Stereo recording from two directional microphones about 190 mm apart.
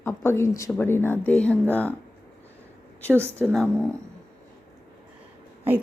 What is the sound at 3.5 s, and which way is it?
Speech, 5° left (ahead or behind).